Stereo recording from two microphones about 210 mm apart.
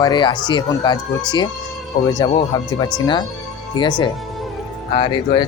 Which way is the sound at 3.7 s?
20° left (ahead or behind).